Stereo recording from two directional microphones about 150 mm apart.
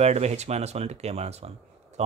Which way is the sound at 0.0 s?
45° right (ahead or behind).